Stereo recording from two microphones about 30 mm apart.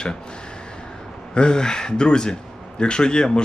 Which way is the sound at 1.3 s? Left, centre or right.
Left.